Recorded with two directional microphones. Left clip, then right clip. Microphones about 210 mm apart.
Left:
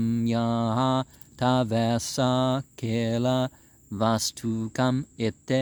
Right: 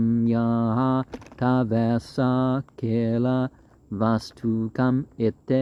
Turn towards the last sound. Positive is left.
turn(degrees=20)  # may be behind; listen again after turning